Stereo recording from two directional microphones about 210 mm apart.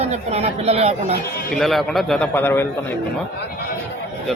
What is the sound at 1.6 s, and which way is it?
A man's voice, centre (ahead or behind).